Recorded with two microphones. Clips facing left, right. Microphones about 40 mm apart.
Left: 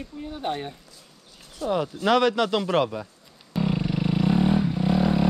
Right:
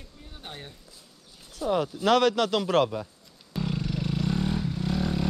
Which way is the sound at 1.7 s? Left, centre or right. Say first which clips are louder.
Left 1 dB; centre.